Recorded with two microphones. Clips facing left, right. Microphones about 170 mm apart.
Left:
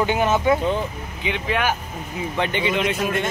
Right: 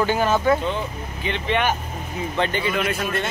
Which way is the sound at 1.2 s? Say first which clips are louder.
Right 1 dB; 5° left (ahead or behind).